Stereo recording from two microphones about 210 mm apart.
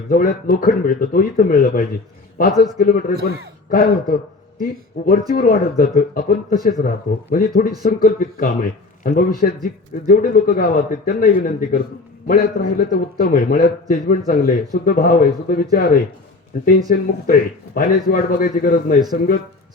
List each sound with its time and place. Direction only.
0.1 s speech: 40° left (ahead or behind)